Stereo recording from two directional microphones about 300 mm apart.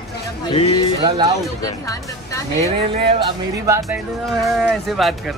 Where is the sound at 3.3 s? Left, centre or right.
Centre.